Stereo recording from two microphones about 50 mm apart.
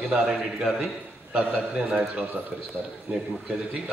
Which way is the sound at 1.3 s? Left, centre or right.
Right.